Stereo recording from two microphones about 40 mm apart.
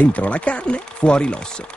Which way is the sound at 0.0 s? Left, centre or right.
Left.